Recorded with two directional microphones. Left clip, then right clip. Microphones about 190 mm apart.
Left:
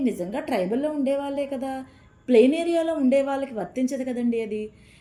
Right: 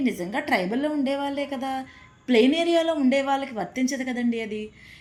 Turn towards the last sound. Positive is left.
turn(degrees=5)  # may be behind; listen again after turning